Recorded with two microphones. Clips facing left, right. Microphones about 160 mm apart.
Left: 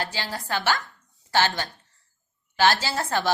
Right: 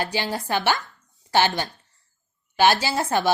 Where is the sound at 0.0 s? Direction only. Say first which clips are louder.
Right 5 dB; 20° right (ahead or behind).